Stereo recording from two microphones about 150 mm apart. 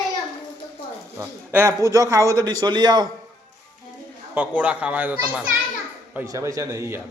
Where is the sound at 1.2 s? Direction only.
15° right (ahead or behind).